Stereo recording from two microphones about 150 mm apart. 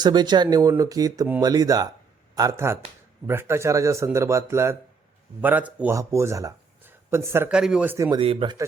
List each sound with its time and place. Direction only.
0.0 s speech: 30° right (ahead or behind)
7.5 s speech: 5° right (ahead or behind)
7.9 s speech: 20° right (ahead or behind)
8.2 s speech: 35° right (ahead or behind)